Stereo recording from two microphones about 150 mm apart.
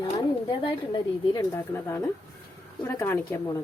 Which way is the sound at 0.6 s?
30° left (ahead or behind).